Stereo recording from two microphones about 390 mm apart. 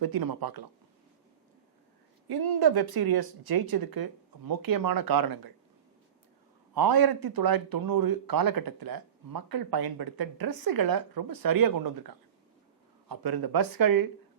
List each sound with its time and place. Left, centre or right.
0.0 s speech: right
2.2 s speech: right
6.7 s speech: right
13.1 s speech: right